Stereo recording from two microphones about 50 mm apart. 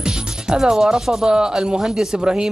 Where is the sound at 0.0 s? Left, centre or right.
Centre.